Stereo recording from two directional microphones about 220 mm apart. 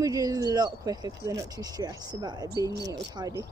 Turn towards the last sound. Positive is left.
turn(degrees=-15)  # may be behind; listen again after turning